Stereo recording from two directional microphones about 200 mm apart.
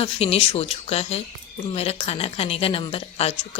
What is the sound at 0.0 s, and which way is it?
A woman's voice, 30° left (ahead or behind).